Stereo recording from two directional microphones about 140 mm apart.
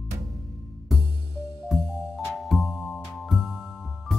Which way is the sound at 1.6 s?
Centre (ahead or behind).